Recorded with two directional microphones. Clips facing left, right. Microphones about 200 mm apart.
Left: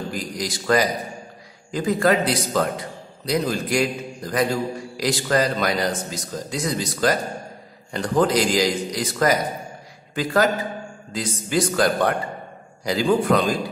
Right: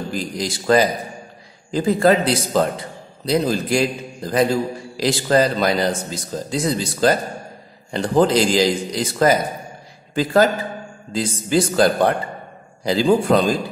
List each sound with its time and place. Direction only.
0.1 s speech: 25° right (ahead or behind)